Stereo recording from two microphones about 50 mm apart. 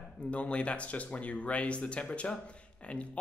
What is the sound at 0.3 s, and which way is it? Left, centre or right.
Speech, left.